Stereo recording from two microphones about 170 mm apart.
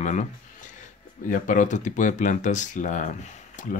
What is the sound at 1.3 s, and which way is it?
Speech, 50° left (ahead or behind).